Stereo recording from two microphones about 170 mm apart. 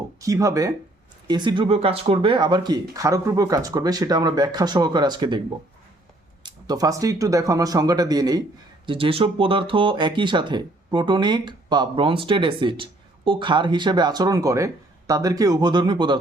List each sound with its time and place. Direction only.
0.2 s speech: 20° right (ahead or behind)
6.4 s speech: 20° right (ahead or behind)
8.9 s speech: 30° right (ahead or behind)